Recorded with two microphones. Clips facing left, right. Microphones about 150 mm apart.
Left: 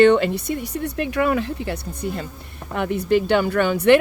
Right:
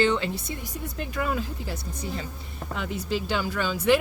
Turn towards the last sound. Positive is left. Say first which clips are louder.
# left 7 dB
turn(degrees=65)  # may be behind; listen again after turning